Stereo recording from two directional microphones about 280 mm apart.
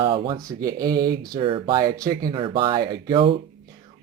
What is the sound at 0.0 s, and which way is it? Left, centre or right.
Speech, centre.